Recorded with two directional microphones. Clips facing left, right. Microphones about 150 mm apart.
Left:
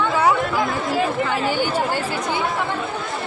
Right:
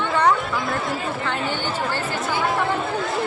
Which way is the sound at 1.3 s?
5° left (ahead or behind).